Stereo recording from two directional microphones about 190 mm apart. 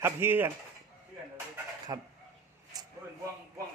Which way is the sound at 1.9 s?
15° right (ahead or behind).